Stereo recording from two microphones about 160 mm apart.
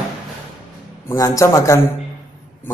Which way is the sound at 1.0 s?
20° left (ahead or behind).